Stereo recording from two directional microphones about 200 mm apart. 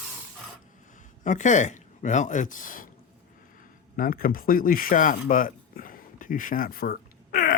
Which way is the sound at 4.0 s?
45° left (ahead or behind).